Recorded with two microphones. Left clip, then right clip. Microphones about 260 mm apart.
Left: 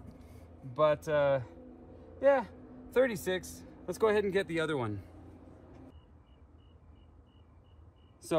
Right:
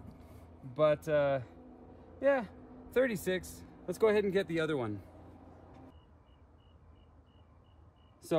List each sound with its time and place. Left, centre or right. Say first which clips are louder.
0.7 s a man's voice: left 1 dB; centre
2.4 s a sound: left 1 dB; centre
3.2 s a man's voice: left 1 dB; right
3.8 s a man's voice: even; left
8.2 s vehicle: left 1 dB; left